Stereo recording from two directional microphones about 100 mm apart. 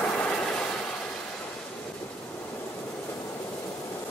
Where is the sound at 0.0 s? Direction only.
10° left (ahead or behind).